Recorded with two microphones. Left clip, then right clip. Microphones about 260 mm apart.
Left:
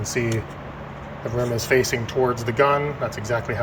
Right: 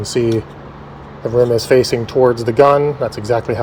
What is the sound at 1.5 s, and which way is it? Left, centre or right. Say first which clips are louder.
Speech: right 8 dB; right.